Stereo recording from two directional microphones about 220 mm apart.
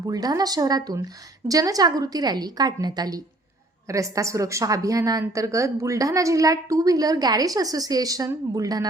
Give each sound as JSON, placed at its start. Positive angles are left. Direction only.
{"t": 0.1, "sound": "a woman's voice", "side_deg": -15}